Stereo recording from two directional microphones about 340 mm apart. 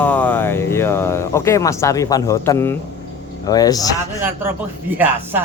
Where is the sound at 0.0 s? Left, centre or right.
Centre.